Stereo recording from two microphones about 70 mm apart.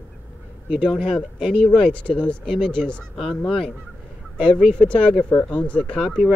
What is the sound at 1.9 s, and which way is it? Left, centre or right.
Speech, centre.